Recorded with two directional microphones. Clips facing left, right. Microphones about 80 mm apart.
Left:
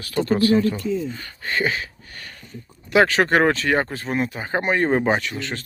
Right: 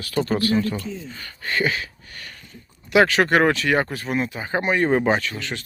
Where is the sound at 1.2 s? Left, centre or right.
Left.